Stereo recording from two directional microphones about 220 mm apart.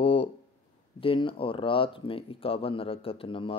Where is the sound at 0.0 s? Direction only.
25° left (ahead or behind).